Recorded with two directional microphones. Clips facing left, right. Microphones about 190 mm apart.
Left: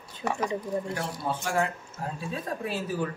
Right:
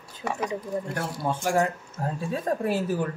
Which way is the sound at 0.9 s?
45° right (ahead or behind).